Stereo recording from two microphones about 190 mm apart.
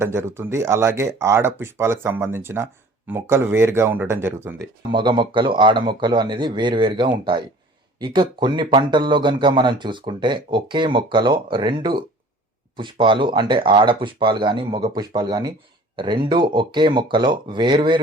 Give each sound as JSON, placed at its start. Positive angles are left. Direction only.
{"t": 0.0, "sound": "speech", "side_deg": -15}
{"t": 4.9, "sound": "speech", "side_deg": -25}